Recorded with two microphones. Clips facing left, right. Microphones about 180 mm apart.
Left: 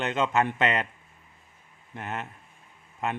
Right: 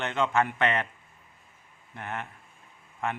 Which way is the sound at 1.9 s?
20° left (ahead or behind).